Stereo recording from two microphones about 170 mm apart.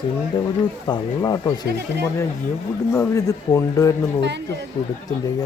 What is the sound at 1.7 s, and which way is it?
Speech, 75° right (ahead or behind).